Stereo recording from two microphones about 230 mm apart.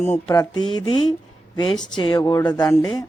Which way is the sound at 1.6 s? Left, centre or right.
Centre.